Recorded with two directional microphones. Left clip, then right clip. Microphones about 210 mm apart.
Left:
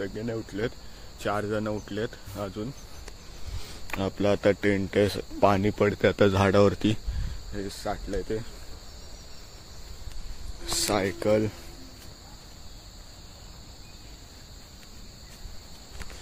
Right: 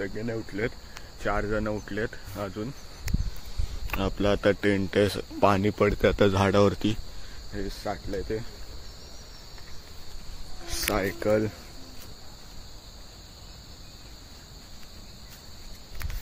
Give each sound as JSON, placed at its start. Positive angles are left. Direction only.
{"t": 0.0, "sound": "speech", "side_deg": 5}
{"t": 7.5, "sound": "cricket", "side_deg": 5}
{"t": 10.9, "sound": "speech", "side_deg": 25}